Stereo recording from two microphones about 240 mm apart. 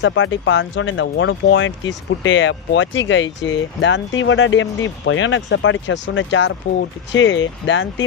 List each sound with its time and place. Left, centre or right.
0.0 s speech: left